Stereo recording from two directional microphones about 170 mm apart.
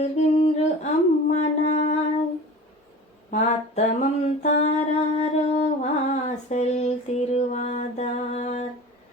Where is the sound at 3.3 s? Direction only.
45° left (ahead or behind).